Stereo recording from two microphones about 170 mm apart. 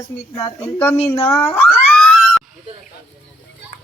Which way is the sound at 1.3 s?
10° left (ahead or behind).